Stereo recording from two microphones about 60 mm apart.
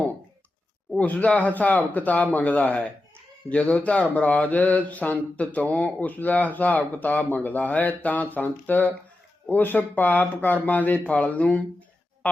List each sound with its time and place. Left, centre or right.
0.9 s speech: left